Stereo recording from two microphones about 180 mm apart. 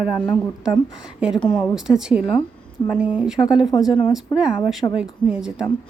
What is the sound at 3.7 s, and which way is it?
Speech, 20° left (ahead or behind).